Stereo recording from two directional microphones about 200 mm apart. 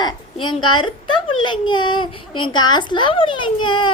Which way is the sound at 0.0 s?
25° left (ahead or behind).